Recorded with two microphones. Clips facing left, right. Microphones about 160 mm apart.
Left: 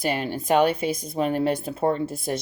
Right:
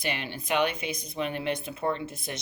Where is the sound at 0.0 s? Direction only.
40° left (ahead or behind).